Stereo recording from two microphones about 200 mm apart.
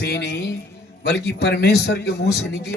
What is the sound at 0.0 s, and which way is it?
Music, 55° left (ahead or behind).